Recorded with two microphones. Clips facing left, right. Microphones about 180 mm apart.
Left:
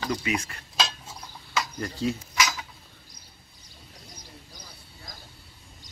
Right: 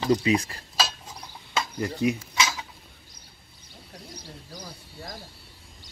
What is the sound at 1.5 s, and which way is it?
Cutlery, 20° right (ahead or behind).